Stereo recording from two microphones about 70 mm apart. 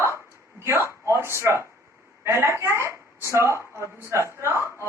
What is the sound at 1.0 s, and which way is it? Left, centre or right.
A woman's voice, right.